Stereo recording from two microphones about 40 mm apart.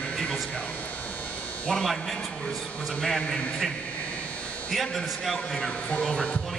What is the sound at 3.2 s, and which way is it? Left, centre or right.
Speech, centre.